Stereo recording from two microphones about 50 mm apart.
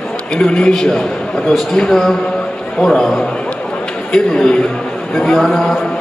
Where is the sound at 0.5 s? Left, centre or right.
Centre.